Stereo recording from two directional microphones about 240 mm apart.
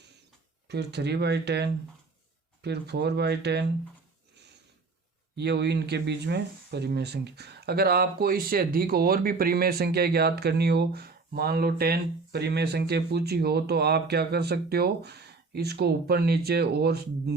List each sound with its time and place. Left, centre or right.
0.7 s speech: right
5.4 s speech: right